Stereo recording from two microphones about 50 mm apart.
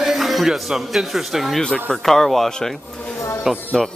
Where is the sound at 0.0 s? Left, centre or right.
Centre.